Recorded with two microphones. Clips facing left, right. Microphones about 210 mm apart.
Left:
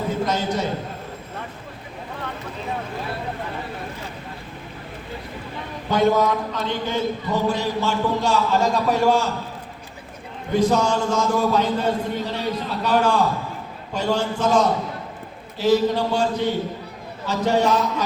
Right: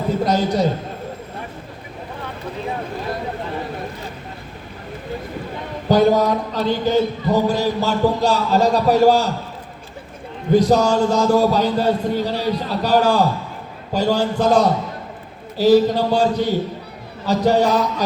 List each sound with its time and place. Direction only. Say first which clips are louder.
0.3 s a man's voice: right 6 dB; 35° right (ahead or behind)
5.9 s a man's voice: right 4 dB; 35° right (ahead or behind)
10.5 s a man's voice: right 4 dB; 35° right (ahead or behind)